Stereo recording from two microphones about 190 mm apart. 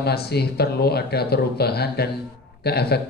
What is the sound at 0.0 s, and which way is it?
Speech, 55° left (ahead or behind).